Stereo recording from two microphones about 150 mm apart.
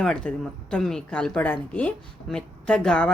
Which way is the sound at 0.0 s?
5° left (ahead or behind).